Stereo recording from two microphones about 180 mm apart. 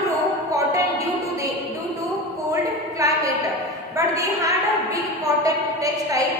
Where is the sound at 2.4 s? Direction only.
20° right (ahead or behind).